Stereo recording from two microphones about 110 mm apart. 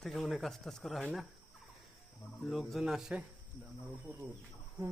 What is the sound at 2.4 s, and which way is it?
Speech, centre (ahead or behind).